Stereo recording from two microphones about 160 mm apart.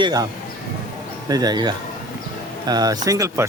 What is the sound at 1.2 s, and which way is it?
Speech, 25° right (ahead or behind).